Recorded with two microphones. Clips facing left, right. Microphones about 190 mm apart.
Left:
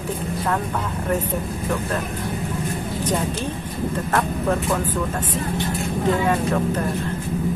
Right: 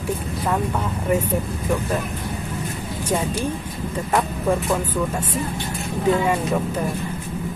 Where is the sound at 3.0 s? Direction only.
10° right (ahead or behind).